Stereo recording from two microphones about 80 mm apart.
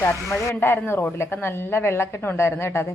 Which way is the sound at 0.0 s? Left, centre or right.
Left.